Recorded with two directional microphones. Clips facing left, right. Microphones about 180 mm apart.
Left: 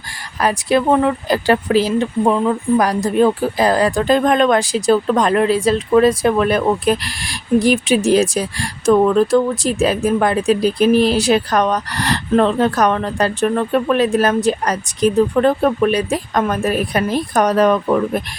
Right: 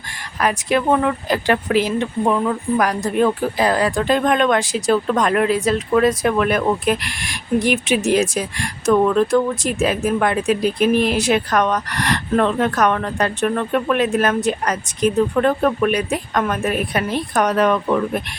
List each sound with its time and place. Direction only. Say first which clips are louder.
0.3 s speech: left 3 dB; 35° left (ahead or behind)